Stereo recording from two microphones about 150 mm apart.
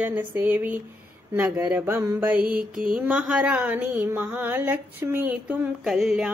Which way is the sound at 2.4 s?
70° right (ahead or behind).